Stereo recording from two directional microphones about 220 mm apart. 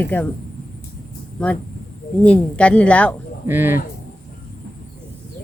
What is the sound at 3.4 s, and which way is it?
Speech, 10° right (ahead or behind).